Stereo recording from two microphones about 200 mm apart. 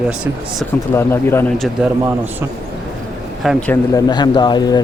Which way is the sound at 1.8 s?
5° right (ahead or behind).